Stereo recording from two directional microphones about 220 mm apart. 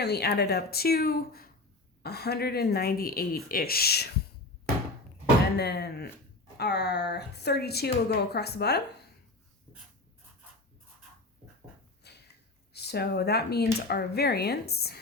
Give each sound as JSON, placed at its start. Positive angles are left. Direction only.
{"t": 0.0, "sound": "speech", "side_deg": 45}
{"t": 5.5, "sound": "speech", "side_deg": 50}
{"t": 12.0, "sound": "a sound", "side_deg": 50}
{"t": 12.7, "sound": "speech", "side_deg": 45}